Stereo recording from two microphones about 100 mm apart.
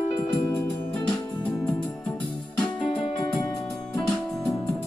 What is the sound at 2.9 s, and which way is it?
Music, 90° left.